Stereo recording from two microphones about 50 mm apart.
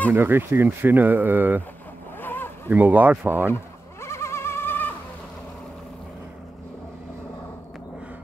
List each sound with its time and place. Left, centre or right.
0.1 s speech: right
2.1 s a sound: left
2.7 s speech: right
3.5 s bird: left